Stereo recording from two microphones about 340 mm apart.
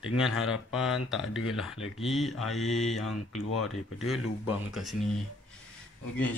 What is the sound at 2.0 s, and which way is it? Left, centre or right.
Speech, centre.